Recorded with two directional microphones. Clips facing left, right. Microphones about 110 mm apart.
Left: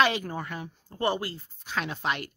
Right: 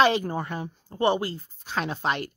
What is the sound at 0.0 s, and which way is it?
Speech, 30° right (ahead or behind).